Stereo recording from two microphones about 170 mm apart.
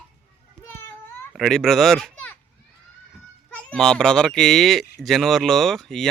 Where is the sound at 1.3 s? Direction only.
Centre (ahead or behind).